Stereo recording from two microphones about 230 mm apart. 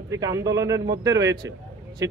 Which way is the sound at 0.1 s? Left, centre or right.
Centre.